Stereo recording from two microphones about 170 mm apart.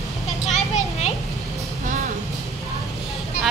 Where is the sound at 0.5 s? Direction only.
45° left (ahead or behind).